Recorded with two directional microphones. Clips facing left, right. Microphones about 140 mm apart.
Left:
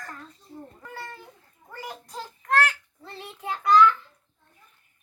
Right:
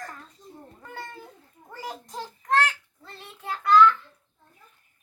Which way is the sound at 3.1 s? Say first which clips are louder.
Left 2 dB; 10° left (ahead or behind).